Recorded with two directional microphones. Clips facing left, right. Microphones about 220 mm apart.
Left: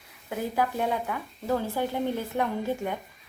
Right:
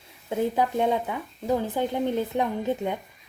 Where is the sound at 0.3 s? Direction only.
20° right (ahead or behind).